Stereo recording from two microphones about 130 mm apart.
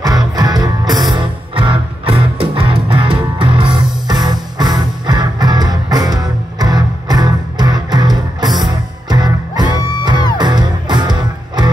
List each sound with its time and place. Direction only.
0.0 s music: 30° right (ahead or behind)